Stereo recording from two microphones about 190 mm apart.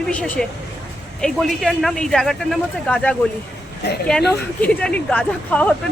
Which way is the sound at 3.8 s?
60° left (ahead or behind).